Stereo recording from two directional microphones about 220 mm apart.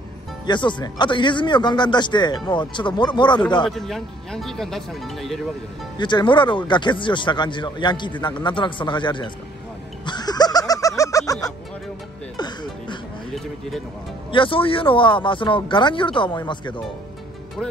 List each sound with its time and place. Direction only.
0.5 s speech: 20° left (ahead or behind)
3.6 s speech: centre (ahead or behind)
5.9 s speech: 20° left (ahead or behind)
10.0 s music: 20° left (ahead or behind)
12.4 s music: 20° left (ahead or behind)
13.3 s a sound: centre (ahead or behind)
14.3 s speech: 25° left (ahead or behind)